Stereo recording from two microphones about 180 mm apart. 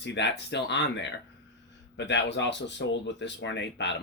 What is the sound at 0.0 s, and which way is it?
Speech, 75° left (ahead or behind).